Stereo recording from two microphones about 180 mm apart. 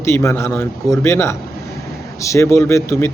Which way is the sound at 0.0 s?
15° left (ahead or behind).